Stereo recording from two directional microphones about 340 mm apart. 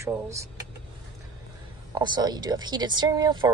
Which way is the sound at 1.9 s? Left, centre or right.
Centre.